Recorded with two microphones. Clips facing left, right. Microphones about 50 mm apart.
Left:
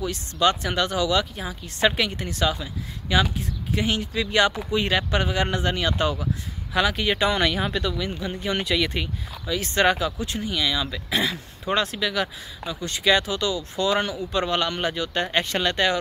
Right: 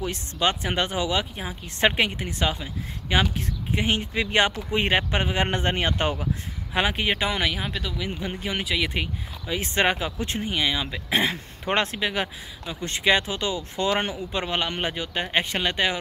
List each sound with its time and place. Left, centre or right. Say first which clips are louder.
0.0 s speech: left 3 dB; right; by 8.1 s centre
8.1 s speech: left 1 dB; right
8.5 s speech: left 3 dB; centre; by 10.1 s right
10.1 s speech: even; right; by 16.0 s centre